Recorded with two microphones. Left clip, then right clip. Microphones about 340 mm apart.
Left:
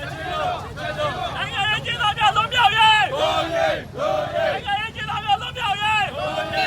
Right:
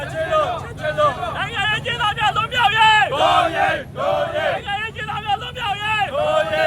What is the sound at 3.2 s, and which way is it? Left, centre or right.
Battle cry, right.